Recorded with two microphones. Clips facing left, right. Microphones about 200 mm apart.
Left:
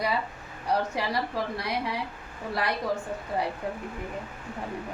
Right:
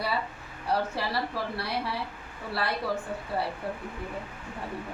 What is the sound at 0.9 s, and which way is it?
Female singing, 15° left (ahead or behind).